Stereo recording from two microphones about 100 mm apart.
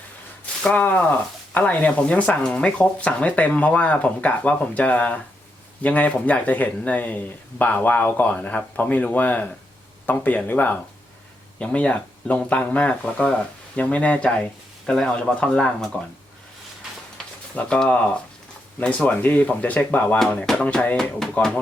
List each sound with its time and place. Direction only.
0.6 s speech: 15° left (ahead or behind)
17.5 s speech: 10° left (ahead or behind)
20.1 s speech: 5° left (ahead or behind)